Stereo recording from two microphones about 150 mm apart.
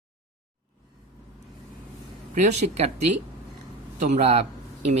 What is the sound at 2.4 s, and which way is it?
Speech, 50° right (ahead or behind).